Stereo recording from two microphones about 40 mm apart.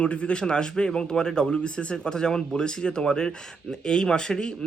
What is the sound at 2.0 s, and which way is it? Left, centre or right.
Speech, centre.